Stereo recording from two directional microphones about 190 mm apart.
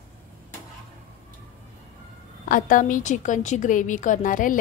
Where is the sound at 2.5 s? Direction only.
45° left (ahead or behind).